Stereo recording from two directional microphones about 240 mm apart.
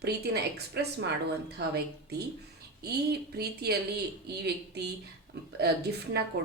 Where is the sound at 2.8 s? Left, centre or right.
Right.